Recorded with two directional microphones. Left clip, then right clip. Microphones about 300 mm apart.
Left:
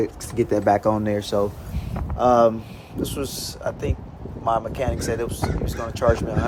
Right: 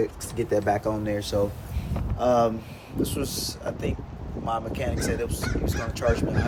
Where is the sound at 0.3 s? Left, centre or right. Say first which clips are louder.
Left 5 dB; left.